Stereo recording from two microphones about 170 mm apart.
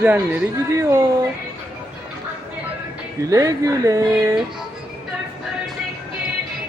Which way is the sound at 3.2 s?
20° right (ahead or behind).